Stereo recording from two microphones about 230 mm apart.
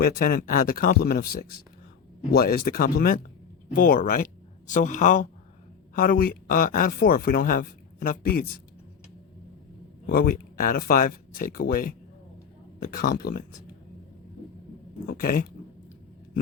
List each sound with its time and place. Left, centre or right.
0.0 s speech: left
10.1 s speech: left
15.0 s speech: left